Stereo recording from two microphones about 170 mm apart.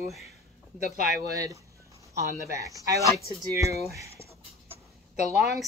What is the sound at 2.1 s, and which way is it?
A woman's voice, 20° right (ahead or behind).